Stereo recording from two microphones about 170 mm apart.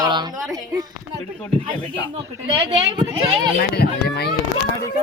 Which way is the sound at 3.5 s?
65° left (ahead or behind).